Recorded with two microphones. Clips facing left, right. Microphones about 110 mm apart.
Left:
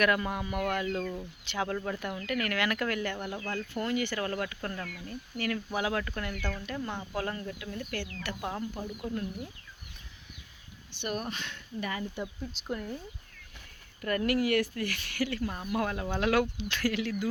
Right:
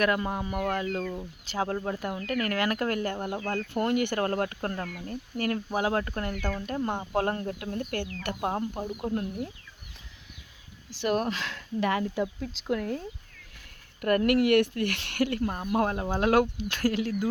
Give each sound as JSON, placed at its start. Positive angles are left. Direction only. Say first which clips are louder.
{"t": 0.0, "sound": "speech", "louder": "right 1 dB", "side_deg": -30}
{"t": 3.5, "sound": "speech", "louder": "right 5 dB", "side_deg": -55}
{"t": 8.7, "sound": "speech", "louder": "right 5 dB", "side_deg": -35}
{"t": 10.9, "sound": "speech", "louder": "right 8 dB", "side_deg": -90}
{"t": 14.0, "sound": "speech", "louder": "right 5 dB", "side_deg": -60}